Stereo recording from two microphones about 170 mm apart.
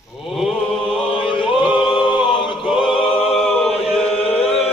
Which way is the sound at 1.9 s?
30° left (ahead or behind).